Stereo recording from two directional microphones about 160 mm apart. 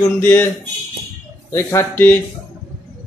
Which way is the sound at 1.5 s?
15° left (ahead or behind).